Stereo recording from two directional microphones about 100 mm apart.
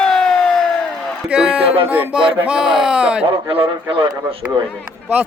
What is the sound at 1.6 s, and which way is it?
Music, 70° right (ahead or behind).